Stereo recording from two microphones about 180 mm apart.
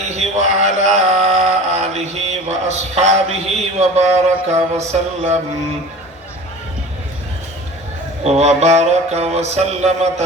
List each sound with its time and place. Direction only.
0.1 s mantra: 40° right (ahead or behind)
8.2 s mantra: 35° right (ahead or behind)